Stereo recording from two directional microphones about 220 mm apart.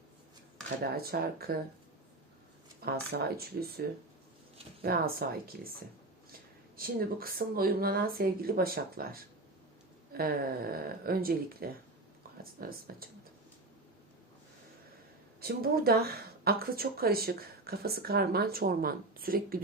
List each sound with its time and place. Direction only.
0.9 s speech: 45° right (ahead or behind)
2.8 s speech: 45° right (ahead or behind)
6.7 s speech: 40° right (ahead or behind)
15.4 s speech: 45° right (ahead or behind)